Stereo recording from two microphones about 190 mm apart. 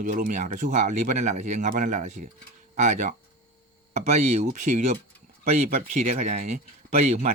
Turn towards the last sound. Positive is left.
turn(degrees=-35)  # may be behind; listen again after turning